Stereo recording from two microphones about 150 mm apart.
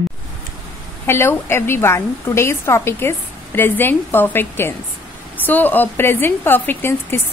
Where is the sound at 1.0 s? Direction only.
15° left (ahead or behind).